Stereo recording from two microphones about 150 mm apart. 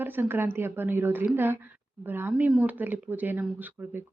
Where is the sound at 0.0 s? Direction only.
15° right (ahead or behind).